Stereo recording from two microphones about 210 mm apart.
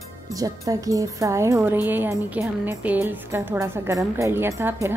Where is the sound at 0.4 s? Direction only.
15° right (ahead or behind).